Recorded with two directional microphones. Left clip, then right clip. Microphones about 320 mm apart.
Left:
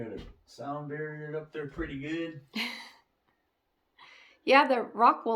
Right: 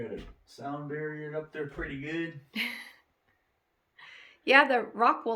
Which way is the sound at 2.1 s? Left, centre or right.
Centre.